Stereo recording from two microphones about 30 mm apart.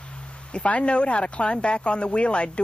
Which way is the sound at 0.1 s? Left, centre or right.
Left.